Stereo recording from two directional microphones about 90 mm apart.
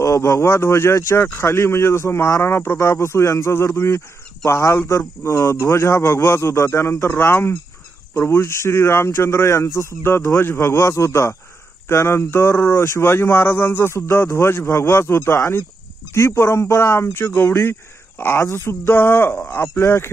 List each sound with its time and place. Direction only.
0.0 s speech: 35° left (ahead or behind)